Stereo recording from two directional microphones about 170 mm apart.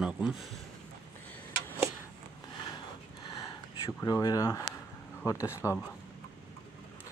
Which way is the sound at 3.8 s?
20° left (ahead or behind).